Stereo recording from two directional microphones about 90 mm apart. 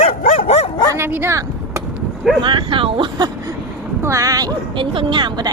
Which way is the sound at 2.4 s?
65° right (ahead or behind).